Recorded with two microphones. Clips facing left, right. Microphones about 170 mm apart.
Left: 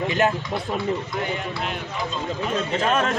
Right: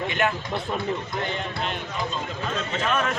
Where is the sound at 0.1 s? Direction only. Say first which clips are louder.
Left 4 dB; 35° left (ahead or behind).